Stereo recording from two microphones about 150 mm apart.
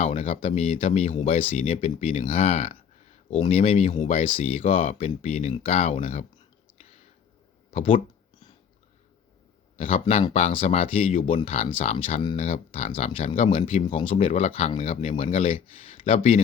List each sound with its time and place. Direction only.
0.0 s speech: 45° left (ahead or behind)
7.7 s a sound: 35° left (ahead or behind)
9.7 s speech: 40° left (ahead or behind)